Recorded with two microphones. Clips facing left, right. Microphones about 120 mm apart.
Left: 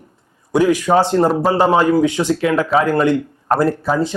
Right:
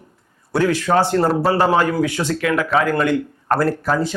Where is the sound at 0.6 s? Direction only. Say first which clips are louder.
Left 3 dB; 15° left (ahead or behind).